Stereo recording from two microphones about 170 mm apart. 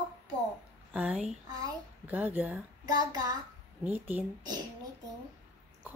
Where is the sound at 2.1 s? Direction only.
10° right (ahead or behind).